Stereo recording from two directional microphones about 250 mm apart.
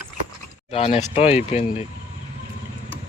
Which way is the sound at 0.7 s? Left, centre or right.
Left.